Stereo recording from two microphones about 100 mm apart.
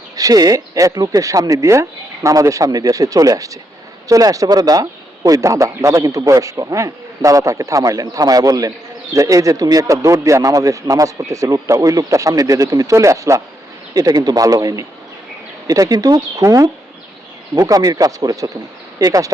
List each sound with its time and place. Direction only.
0.2 s a man's voice: 35° right (ahead or behind)
16.4 s a man's voice: 30° right (ahead or behind)